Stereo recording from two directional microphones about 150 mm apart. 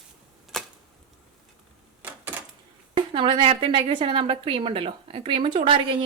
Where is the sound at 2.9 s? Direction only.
35° right (ahead or behind).